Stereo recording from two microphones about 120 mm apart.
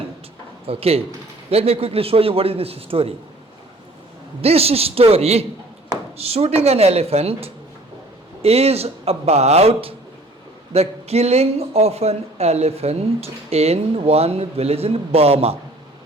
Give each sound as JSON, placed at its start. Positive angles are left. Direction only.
{"t": 0.7, "sound": "a man's voice", "side_deg": -55}
{"t": 4.4, "sound": "speech", "side_deg": -55}